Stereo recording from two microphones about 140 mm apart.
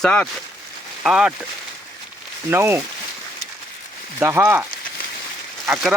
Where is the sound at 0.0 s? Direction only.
10° left (ahead or behind).